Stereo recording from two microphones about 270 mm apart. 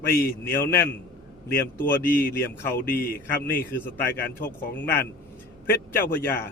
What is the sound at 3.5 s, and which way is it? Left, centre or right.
Speech, centre.